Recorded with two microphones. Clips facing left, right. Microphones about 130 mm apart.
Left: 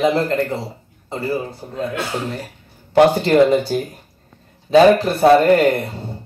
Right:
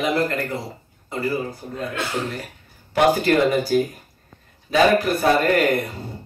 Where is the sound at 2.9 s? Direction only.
25° left (ahead or behind).